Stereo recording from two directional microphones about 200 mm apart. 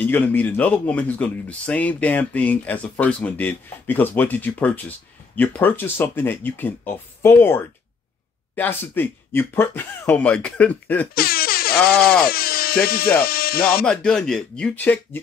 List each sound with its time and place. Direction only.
0.0 s speech: 10° left (ahead or behind)
11.1 s air horn: 50° left (ahead or behind)
12.3 s speech: 50° left (ahead or behind)
13.8 s speech: 5° left (ahead or behind)